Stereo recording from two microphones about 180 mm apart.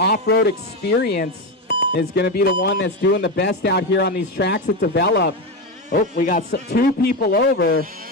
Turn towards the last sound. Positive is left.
turn(degrees=60)  # may be behind; listen again after turning